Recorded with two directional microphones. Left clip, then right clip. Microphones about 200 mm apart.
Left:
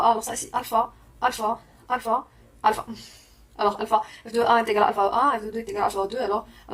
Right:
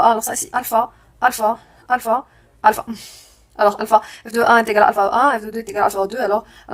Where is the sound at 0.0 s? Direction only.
35° right (ahead or behind).